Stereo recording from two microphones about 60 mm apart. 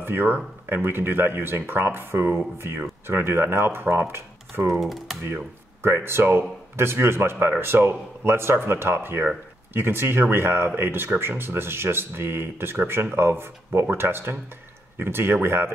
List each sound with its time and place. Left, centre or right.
0.0 s speech: right
4.6 s speech: centre
5.3 s speech: right